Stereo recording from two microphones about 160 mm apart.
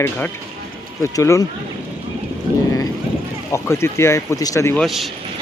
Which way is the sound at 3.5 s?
15° left (ahead or behind).